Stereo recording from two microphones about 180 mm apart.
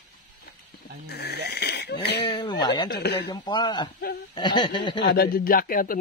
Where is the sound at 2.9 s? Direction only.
65° left (ahead or behind).